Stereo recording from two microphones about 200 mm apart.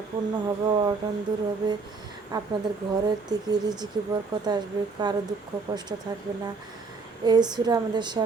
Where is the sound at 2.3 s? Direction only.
20° right (ahead or behind).